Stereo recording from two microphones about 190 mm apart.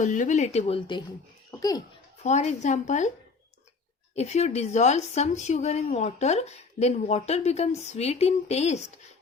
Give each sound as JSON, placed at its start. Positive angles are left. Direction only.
{"t": 0.0, "sound": "a woman's voice", "side_deg": 40}
{"t": 1.5, "sound": "a sound", "side_deg": 20}
{"t": 2.2, "sound": "a woman's voice", "side_deg": 35}
{"t": 4.1, "sound": "a woman's voice", "side_deg": 35}